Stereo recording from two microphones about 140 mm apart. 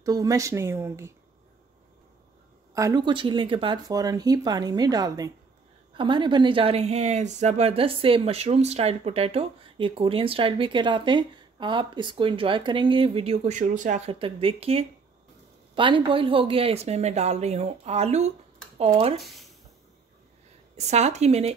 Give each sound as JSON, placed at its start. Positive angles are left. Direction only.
{"t": 0.0, "sound": "speech", "side_deg": -25}
{"t": 2.7, "sound": "speech", "side_deg": -25}
{"t": 14.0, "sound": "speech", "side_deg": -40}
{"t": 19.2, "sound": "speech", "side_deg": 0}
{"t": 20.7, "sound": "speech", "side_deg": -55}